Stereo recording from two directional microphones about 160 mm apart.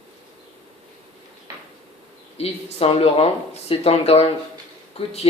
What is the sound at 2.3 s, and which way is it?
Speech, 40° left (ahead or behind).